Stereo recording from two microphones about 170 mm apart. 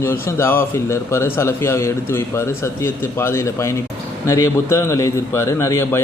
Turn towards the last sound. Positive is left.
turn(degrees=15)  # may be behind; listen again after turning